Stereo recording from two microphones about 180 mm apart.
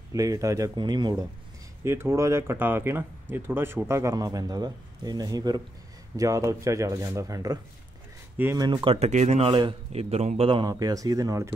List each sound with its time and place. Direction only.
0.1 s speech: 20° right (ahead or behind)
8.5 s speech: 25° right (ahead or behind)